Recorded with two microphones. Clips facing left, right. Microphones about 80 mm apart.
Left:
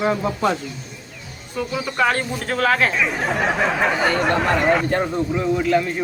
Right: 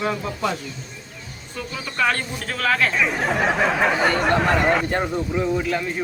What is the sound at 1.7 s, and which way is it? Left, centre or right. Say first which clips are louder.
Speech: left 2 dB; left.